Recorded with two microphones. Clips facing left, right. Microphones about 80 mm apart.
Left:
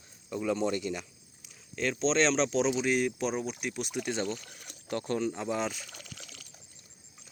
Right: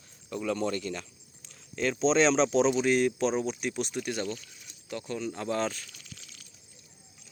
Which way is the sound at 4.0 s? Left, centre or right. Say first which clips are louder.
Even; centre.